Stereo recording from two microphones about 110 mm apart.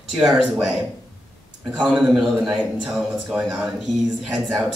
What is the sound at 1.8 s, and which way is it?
A man's voice, 5° right (ahead or behind).